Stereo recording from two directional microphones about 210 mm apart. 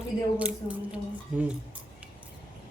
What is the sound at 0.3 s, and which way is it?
Speech, 5° right (ahead or behind).